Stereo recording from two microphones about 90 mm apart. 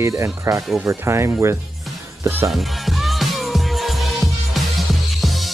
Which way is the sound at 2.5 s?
Centre (ahead or behind).